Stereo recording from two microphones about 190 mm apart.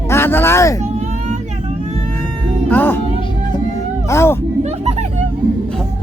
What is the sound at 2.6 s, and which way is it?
Music, 10° left (ahead or behind).